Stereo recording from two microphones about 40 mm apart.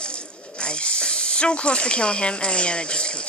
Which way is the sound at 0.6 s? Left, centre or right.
Left.